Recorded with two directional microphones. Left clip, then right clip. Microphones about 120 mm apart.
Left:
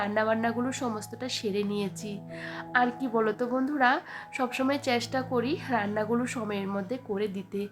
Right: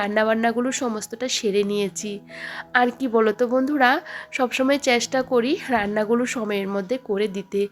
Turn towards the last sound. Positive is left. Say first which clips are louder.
# right 9 dB
turn(degrees=-30)  # may be behind; listen again after turning